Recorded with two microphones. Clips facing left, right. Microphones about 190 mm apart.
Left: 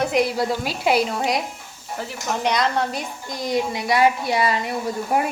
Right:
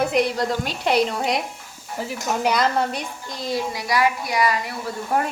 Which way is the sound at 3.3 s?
15° left (ahead or behind).